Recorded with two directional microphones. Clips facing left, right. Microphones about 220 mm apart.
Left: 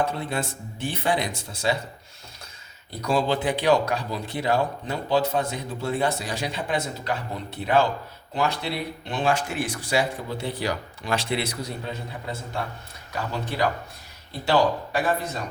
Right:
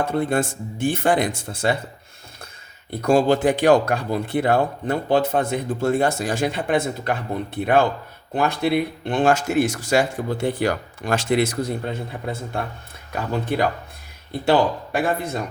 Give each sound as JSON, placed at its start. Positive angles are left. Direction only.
{"t": 0.0, "sound": "speech", "side_deg": -50}
{"t": 2.9, "sound": "speech", "side_deg": -50}
{"t": 13.1, "sound": "speech", "side_deg": -55}
{"t": 14.9, "sound": "speech", "side_deg": -55}